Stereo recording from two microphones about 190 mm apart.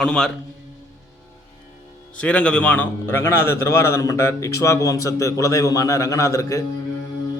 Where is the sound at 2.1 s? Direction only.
5° left (ahead or behind).